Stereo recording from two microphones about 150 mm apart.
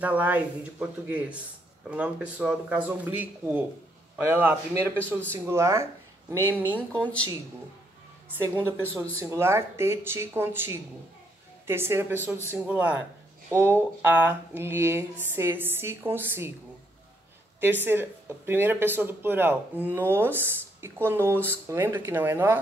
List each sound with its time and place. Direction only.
0.0 s speech: 10° right (ahead or behind)
8.4 s speech: 15° right (ahead or behind)
17.6 s speech: 15° right (ahead or behind)